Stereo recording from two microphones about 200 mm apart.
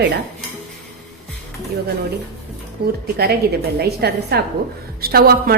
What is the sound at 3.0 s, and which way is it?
A woman's voice, 55° right (ahead or behind).